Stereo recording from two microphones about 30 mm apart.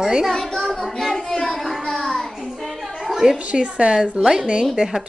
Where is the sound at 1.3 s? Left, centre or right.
Centre.